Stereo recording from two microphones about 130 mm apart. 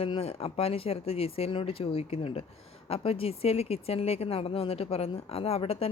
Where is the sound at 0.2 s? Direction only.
50° left (ahead or behind).